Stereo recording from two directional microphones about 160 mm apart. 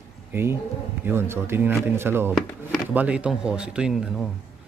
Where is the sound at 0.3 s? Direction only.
15° right (ahead or behind).